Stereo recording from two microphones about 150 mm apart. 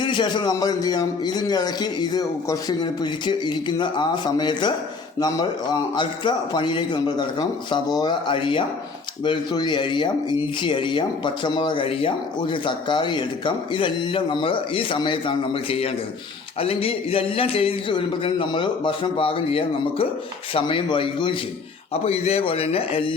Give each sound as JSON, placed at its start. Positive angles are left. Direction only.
{"t": 0.0, "sound": "a man's voice", "side_deg": 30}